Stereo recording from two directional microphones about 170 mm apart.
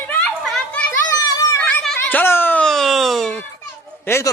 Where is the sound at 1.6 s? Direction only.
5° left (ahead or behind).